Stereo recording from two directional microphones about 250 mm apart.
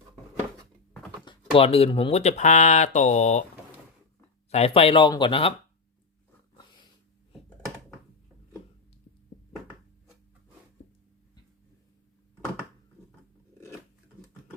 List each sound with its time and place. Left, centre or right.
1.2 s speech: centre
4.5 s speech: left
6.6 s snort: centre